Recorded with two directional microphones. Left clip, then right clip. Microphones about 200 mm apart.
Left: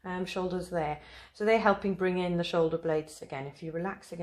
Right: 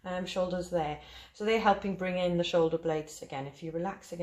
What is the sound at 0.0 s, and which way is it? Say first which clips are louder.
Speech: right 2 dB; 40° left (ahead or behind).